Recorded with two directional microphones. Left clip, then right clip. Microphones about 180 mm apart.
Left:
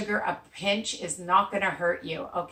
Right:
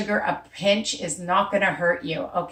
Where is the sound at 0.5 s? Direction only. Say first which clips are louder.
Right 9 dB; 15° left (ahead or behind).